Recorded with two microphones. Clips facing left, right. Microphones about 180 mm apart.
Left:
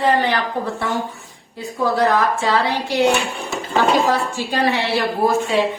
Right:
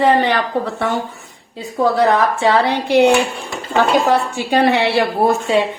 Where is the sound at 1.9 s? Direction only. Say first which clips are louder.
Even; 65° right (ahead or behind).